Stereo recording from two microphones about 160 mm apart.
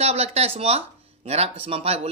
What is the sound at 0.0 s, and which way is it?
Speech, 40° right (ahead or behind).